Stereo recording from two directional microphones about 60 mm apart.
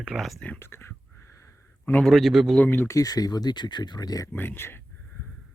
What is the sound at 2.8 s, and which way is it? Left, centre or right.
Speech, left.